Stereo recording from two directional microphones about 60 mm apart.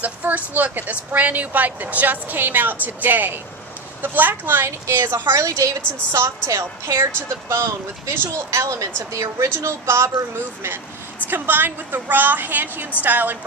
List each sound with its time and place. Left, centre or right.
0.0 s a woman's voice: right
6.1 s speech: right
8.5 s speech: right
9.6 s speech: right
11.2 s a woman's voice: right